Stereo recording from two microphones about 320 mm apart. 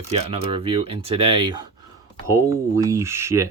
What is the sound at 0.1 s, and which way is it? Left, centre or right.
Speech, centre.